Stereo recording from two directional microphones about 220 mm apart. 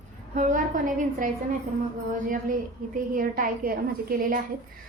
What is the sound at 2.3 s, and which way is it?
A woman's voice, 40° right (ahead or behind).